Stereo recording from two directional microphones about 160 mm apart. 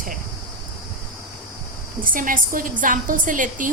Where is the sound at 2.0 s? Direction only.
60° right (ahead or behind).